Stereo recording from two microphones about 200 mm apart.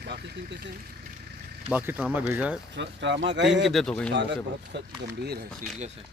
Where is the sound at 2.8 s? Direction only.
60° right (ahead or behind).